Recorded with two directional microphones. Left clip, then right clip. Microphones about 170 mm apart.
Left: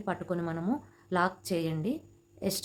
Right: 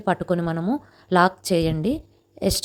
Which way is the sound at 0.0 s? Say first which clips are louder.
Right 11 dB; 45° right (ahead or behind).